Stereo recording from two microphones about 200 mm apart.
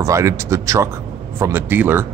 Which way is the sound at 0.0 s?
15° right (ahead or behind).